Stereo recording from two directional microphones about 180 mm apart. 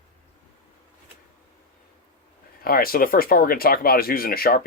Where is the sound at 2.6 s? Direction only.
55° left (ahead or behind).